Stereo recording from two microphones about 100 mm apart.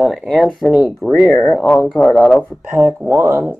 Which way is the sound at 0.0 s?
Centre (ahead or behind).